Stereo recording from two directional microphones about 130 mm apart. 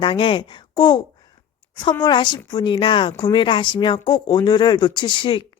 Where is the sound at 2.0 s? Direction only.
35° left (ahead or behind).